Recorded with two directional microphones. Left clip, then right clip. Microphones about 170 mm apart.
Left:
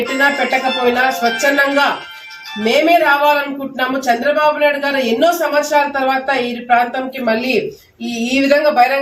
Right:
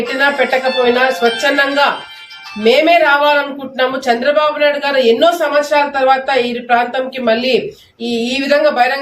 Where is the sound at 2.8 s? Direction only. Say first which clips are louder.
Left 2 dB; 15° right (ahead or behind).